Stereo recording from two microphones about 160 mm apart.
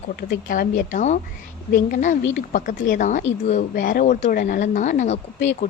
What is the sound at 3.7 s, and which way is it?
A woman's voice, 65° left (ahead or behind).